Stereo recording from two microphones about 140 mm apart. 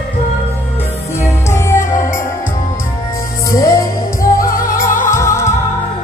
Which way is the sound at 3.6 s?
25° left (ahead or behind).